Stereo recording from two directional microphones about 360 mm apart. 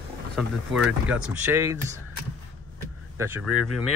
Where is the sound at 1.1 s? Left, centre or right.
Centre.